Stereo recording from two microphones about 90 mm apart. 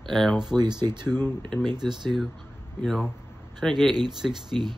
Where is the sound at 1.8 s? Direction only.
5° left (ahead or behind).